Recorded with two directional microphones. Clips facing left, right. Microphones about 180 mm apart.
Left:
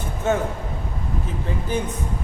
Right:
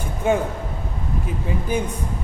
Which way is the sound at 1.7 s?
10° right (ahead or behind).